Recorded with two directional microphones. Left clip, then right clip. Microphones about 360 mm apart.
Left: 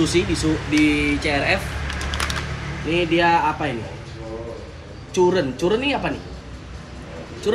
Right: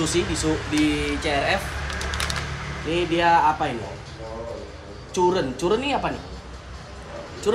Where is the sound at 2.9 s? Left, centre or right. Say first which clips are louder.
Left 2 dB; centre.